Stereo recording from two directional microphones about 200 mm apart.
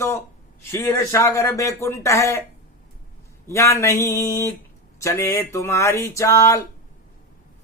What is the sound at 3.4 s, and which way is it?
Speech, 15° left (ahead or behind).